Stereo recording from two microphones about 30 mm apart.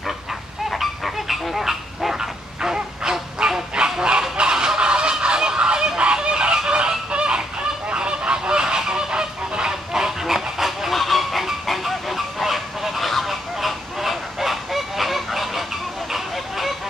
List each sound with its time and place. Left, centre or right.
0.7 s a sound: centre
2.1 s goose: right
4.4 s fowl: right
7.9 s goose: right; by 10.9 s centre
10.9 s goose: centre